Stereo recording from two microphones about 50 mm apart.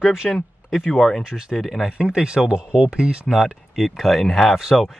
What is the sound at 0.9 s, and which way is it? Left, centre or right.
Speech, centre.